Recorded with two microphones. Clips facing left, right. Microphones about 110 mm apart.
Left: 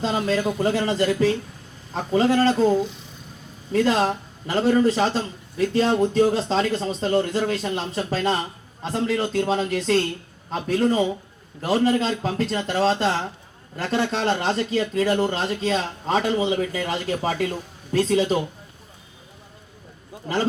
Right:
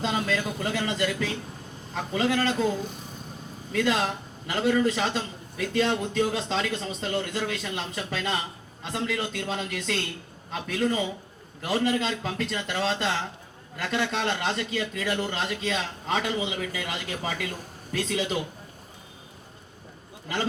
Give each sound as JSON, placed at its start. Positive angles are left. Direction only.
{"t": 0.0, "sound": "a man's voice", "side_deg": 35}
{"t": 2.8, "sound": "speech", "side_deg": -50}
{"t": 3.7, "sound": "a man's voice", "side_deg": 35}
{"t": 20.3, "sound": "a man's voice", "side_deg": 40}